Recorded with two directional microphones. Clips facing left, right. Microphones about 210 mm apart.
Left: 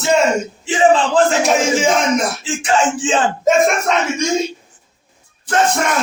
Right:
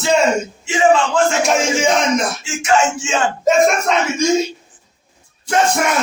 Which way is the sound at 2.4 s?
35° left (ahead or behind).